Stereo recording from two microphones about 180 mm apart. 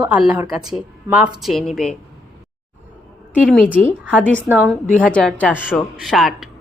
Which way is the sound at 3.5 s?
5° left (ahead or behind).